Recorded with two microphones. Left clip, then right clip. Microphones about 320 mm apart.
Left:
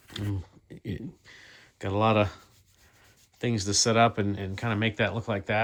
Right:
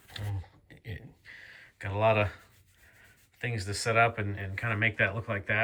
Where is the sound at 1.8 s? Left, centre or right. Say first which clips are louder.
Left 2 dB; centre.